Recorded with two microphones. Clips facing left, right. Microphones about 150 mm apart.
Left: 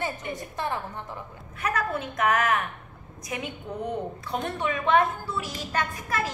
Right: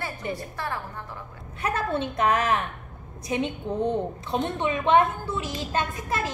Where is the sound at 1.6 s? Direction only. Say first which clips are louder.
Right 2 dB; 30° right (ahead or behind).